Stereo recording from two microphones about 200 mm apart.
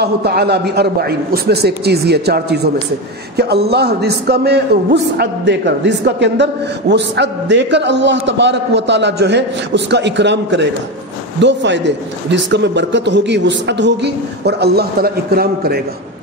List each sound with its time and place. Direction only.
0.0 s a woman's voice: 55° right (ahead or behind)